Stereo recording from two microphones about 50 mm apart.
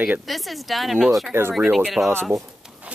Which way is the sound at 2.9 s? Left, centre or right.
Right.